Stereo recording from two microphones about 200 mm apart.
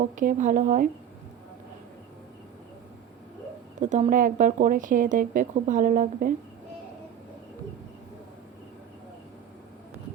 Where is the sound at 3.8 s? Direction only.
40° right (ahead or behind).